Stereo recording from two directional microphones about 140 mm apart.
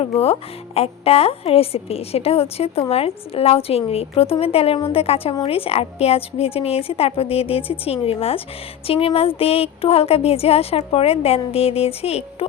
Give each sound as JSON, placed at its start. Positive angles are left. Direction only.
{"t": 0.2, "sound": "a woman's voice", "side_deg": 45}